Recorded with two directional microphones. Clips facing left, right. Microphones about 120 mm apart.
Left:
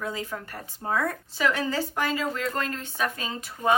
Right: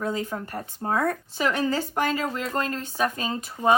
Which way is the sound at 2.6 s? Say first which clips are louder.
Right 3 dB; 35° right (ahead or behind).